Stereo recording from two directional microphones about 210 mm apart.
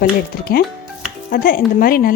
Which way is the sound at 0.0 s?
45° left (ahead or behind).